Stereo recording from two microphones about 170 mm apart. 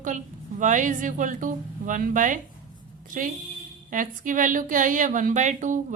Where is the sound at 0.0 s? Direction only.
50° right (ahead or behind).